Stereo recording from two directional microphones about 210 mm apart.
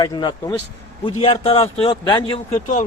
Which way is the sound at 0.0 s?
20° left (ahead or behind).